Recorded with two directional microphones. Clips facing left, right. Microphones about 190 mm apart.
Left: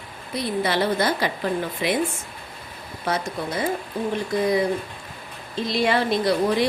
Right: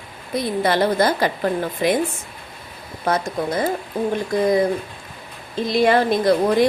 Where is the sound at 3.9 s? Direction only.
50° right (ahead or behind).